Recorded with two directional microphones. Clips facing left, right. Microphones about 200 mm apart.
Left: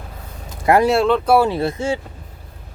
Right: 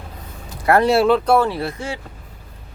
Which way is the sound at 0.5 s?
20° left (ahead or behind).